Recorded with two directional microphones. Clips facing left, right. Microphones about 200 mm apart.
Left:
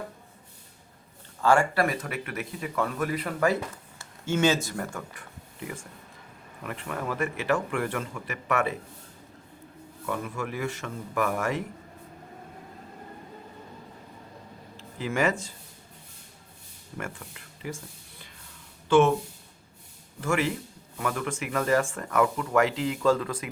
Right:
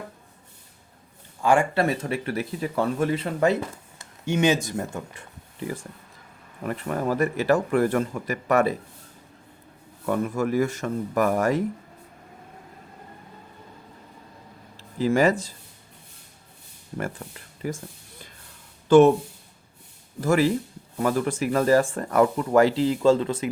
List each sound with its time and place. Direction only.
1.4 s speech: 15° right (ahead or behind); by 8.7 s 40° right (ahead or behind)
10.1 s speech: 40° right (ahead or behind)
14.8 s speech: 35° right (ahead or behind)
17.0 s speech: 35° right (ahead or behind)
18.9 s speech: 40° right (ahead or behind)
20.2 s speech: 35° right (ahead or behind)